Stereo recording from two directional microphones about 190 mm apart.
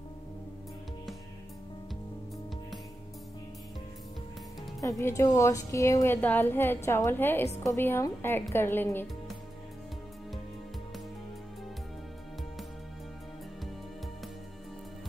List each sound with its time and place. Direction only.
4.7 s a woman's voice: 15° left (ahead or behind)